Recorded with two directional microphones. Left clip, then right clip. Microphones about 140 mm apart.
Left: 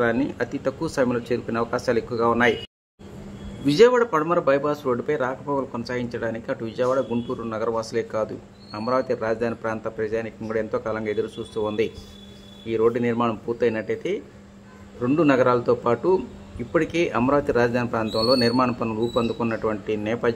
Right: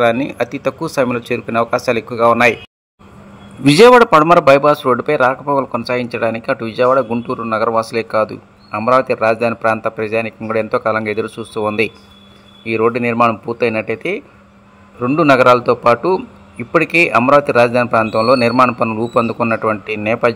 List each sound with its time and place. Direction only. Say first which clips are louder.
0.0 s a man's voice: right 8 dB; 30° right (ahead or behind)
3.6 s a man's voice: right 10 dB; 70° right (ahead or behind)
4.2 s a man's voice: right 12 dB; 45° right (ahead or behind)